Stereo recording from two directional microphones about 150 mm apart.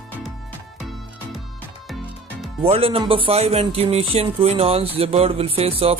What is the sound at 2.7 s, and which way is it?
A man's voice, 40° right (ahead or behind).